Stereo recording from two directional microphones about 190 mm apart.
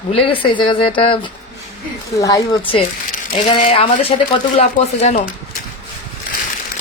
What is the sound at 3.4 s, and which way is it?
Speech, 40° left (ahead or behind).